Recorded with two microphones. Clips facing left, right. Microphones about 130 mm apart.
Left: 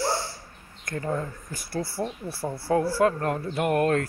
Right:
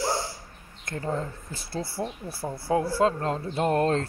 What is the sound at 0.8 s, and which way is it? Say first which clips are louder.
Speech: left 1 dB; 25° right (ahead or behind).